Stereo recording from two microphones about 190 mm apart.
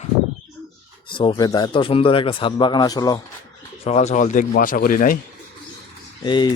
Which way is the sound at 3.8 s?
35° left (ahead or behind).